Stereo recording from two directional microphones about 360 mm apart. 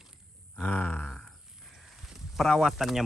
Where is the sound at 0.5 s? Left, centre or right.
Centre.